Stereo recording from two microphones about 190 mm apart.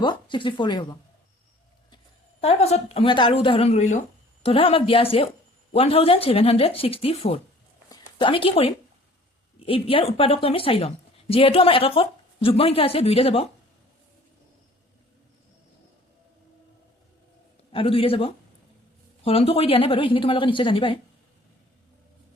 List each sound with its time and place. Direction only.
0.0 s a woman's voice: 25° left (ahead or behind)
2.4 s a woman's voice: 35° left (ahead or behind)
7.9 s a sound: 25° left (ahead or behind)
9.6 s a woman's voice: 30° left (ahead or behind)
17.7 s a woman's voice: 30° left (ahead or behind)